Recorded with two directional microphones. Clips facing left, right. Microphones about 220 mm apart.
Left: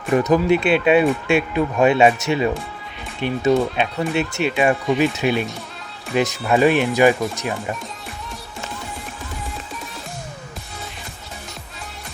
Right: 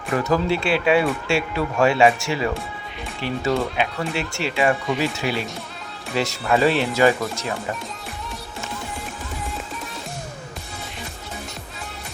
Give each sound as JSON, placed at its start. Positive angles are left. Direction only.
{"t": 0.1, "sound": "speech", "side_deg": 20}